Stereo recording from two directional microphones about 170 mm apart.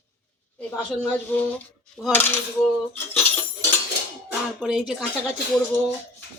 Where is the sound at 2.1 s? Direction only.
10° left (ahead or behind).